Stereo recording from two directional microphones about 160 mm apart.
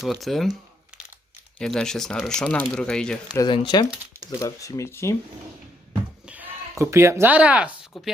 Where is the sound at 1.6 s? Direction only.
5° left (ahead or behind).